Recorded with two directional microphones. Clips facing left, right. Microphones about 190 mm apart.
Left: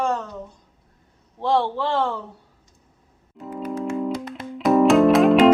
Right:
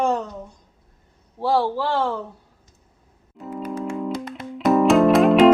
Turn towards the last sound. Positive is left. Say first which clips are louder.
# even
turn(degrees=0)  # may be behind; listen again after turning